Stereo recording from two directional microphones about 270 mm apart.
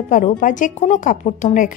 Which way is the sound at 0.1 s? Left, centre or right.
Left.